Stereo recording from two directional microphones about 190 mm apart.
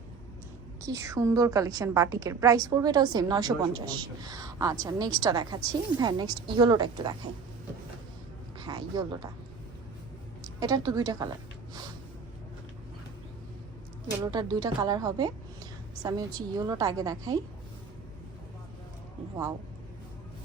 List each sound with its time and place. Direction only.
0.9 s a woman's voice: 15° right (ahead or behind)
8.5 s speech: 20° right (ahead or behind)
10.4 s a woman's voice: 20° right (ahead or behind)
14.2 s a woman's voice: 20° right (ahead or behind)